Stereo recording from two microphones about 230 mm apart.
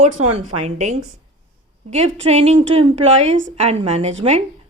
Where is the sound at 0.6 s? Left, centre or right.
Right.